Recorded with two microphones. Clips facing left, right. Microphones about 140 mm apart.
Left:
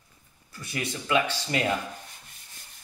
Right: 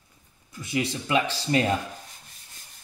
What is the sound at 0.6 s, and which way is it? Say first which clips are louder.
Speech: right 5 dB; 25° right (ahead or behind).